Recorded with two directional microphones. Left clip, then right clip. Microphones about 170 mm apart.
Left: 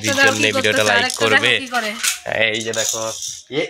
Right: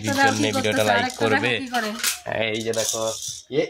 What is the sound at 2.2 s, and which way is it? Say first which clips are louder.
Speech: left 8 dB; 5° left (ahead or behind).